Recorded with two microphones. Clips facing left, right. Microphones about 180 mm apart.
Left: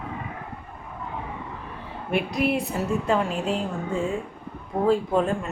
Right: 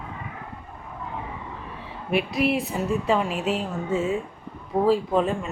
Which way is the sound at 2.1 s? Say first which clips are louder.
Right 1 dB; centre (ahead or behind).